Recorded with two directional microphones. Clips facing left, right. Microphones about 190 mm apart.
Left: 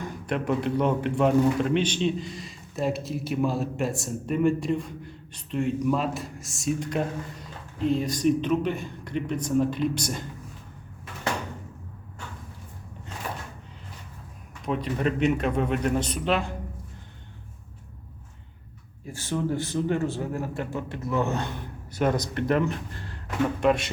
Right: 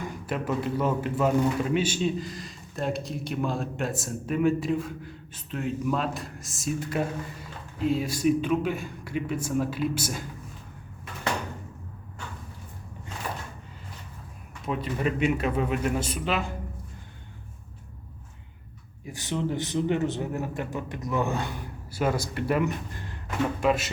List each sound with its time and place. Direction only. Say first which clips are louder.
0.3 s a man's voice: left 3 dB; 5° right (ahead or behind)
14.6 s a man's voice: left 2 dB; centre (ahead or behind)
19.0 s a man's voice: left 1 dB; 15° right (ahead or behind)
23.6 s a man's voice: left 2 dB; 5° right (ahead or behind)